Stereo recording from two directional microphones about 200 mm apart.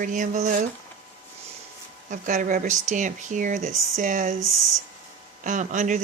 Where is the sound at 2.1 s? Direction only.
40° right (ahead or behind).